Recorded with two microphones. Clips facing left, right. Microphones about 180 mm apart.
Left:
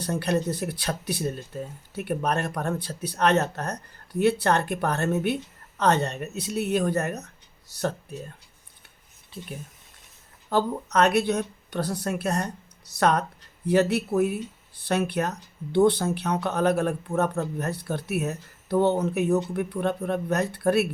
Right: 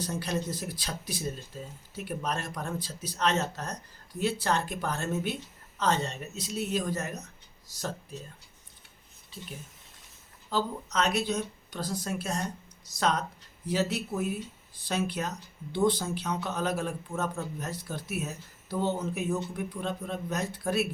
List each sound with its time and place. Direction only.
0.0 s speech: 65° left (ahead or behind)
10.5 s speech: 60° left (ahead or behind)